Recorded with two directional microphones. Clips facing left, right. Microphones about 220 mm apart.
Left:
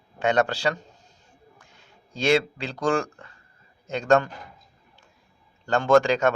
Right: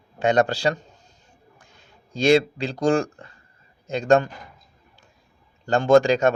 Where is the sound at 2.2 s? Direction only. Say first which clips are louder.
Right 4 dB; 40° right (ahead or behind).